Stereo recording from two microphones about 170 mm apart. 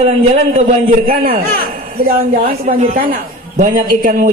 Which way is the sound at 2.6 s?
45° right (ahead or behind).